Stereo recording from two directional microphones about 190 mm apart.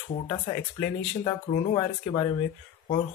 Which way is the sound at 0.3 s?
20° left (ahead or behind).